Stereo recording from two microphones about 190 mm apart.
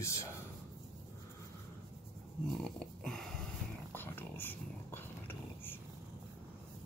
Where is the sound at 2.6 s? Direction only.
5° left (ahead or behind).